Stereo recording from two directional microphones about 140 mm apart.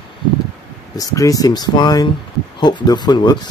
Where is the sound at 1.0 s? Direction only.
25° left (ahead or behind).